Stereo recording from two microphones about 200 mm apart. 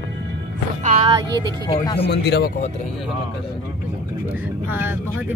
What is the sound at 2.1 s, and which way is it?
Speech, 55° left (ahead or behind).